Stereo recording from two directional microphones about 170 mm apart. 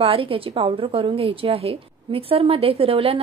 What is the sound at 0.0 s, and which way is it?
A woman's voice, 30° right (ahead or behind).